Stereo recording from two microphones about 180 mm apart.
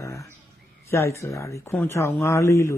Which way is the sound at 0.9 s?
15° left (ahead or behind).